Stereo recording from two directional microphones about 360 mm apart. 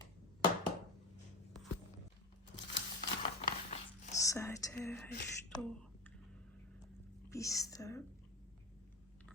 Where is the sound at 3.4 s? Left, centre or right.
Centre.